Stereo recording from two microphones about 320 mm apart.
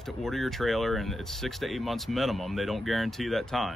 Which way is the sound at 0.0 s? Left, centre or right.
Centre.